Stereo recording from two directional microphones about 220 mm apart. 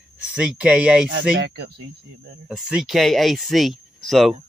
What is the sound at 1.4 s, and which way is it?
Speech, 55° right (ahead or behind).